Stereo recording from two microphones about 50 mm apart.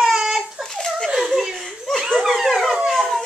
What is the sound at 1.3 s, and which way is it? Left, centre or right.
Chuckle, centre.